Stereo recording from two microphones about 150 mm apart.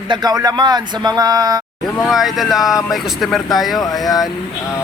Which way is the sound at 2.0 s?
Centre (ahead or behind).